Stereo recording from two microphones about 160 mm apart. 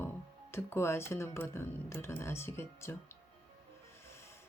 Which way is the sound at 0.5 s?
15° left (ahead or behind).